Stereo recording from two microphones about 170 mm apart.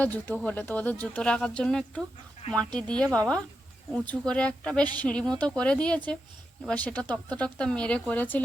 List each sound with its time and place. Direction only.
0.0 s speech: 10° left (ahead or behind)